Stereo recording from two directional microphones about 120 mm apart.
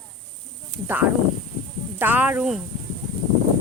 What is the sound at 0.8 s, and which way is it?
Speech, 15° right (ahead or behind).